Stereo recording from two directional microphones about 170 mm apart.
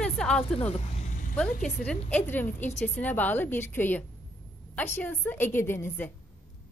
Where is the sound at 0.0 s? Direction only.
5° left (ahead or behind).